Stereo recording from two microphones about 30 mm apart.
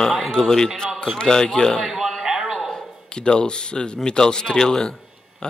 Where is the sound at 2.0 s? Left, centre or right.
Centre.